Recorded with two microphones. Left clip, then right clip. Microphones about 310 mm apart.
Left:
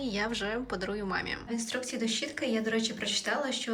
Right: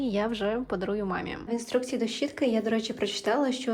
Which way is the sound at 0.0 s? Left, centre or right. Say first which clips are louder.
Right 4 dB; centre.